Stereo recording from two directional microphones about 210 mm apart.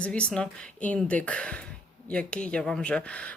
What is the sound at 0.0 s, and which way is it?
Speech, 5° left (ahead or behind).